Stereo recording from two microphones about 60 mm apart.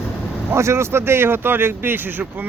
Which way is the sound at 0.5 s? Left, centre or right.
Right.